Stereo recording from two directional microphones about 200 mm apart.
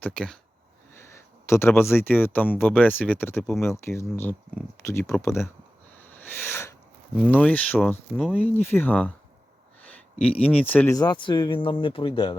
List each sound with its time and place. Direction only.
0.0 s speech: 5° left (ahead or behind)
6.0 s a sound: 10° left (ahead or behind)
7.3 s speech: 10° left (ahead or behind); by 12.4 s 25° left (ahead or behind)